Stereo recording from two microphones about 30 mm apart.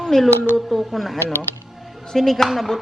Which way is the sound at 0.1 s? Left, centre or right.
Centre.